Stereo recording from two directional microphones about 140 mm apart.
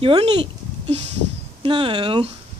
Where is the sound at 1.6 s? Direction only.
40° right (ahead or behind).